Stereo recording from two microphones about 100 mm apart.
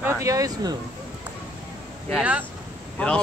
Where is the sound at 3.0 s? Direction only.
15° left (ahead or behind).